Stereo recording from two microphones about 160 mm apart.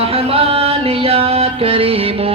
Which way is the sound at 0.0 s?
35° right (ahead or behind).